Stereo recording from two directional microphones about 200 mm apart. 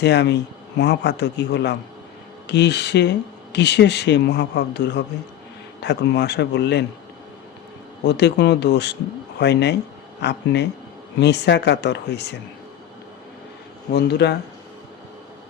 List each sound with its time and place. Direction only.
0.0 s speech: 60° left (ahead or behind)
8.0 s speech: 60° left (ahead or behind)
13.9 s speech: 55° left (ahead or behind)